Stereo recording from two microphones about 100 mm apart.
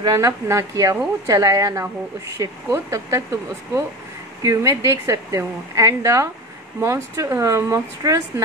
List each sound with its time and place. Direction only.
0.0 s a woman's voice: 35° right (ahead or behind)
4.4 s a woman's voice: 30° right (ahead or behind)